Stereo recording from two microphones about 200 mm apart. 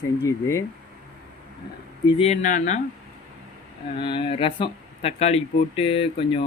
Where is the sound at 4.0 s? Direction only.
25° left (ahead or behind).